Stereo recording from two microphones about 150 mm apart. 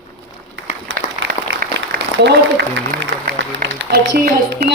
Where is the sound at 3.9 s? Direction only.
90° right.